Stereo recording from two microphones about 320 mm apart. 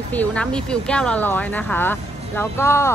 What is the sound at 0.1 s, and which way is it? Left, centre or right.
Speech, centre.